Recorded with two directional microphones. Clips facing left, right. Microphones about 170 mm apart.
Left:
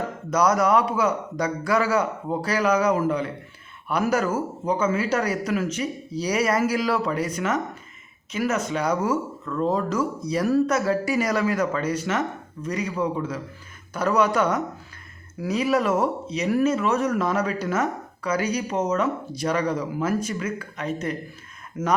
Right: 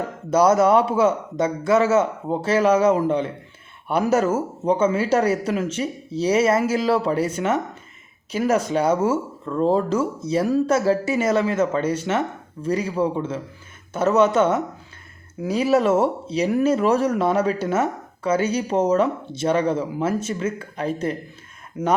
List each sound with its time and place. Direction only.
0.3 s speech: 30° right (ahead or behind)
21.7 s speech: 20° right (ahead or behind)